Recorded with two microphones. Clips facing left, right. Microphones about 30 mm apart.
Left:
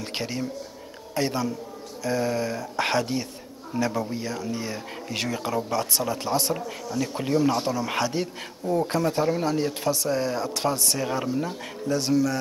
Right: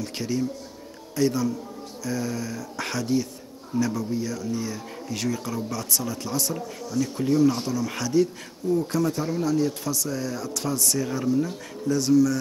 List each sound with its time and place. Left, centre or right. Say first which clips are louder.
0.0 s speech: right 2 dB; left